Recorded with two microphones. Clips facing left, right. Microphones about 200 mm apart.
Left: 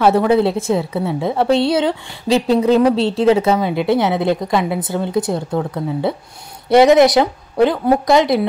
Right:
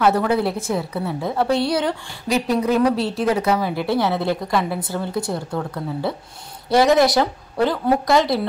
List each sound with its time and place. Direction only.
0.0 s a woman's voice: 25° left (ahead or behind)